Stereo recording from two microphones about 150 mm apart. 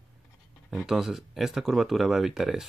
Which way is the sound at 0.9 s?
5° right (ahead or behind).